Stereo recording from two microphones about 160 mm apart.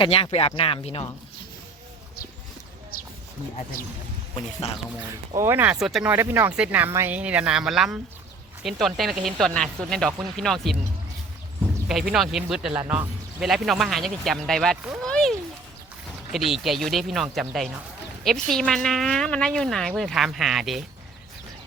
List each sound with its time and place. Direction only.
0.0 s speech: 35° left (ahead or behind)
4.6 s speech: 40° left (ahead or behind)
5.4 s speech: 15° right (ahead or behind); by 10.8 s centre (ahead or behind)
11.9 s a child's voice: 5° right (ahead or behind)
16.5 s speech: centre (ahead or behind)